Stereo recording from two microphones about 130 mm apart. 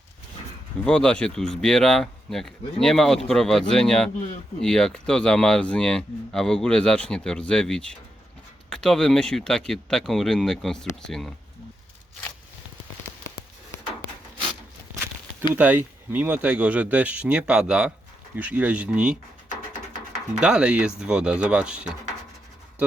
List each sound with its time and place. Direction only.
0.9 s speech: 5° left (ahead or behind)
15.5 s speech: 10° right (ahead or behind)
20.4 s speech: 5° right (ahead or behind)